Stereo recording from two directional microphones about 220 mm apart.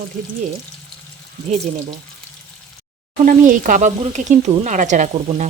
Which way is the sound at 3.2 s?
35° right (ahead or behind).